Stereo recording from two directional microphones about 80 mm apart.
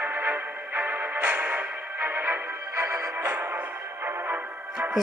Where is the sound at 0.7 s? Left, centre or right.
Right.